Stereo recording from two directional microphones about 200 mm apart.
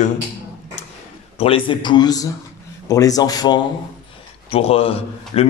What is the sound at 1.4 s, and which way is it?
A man's voice, 25° left (ahead or behind).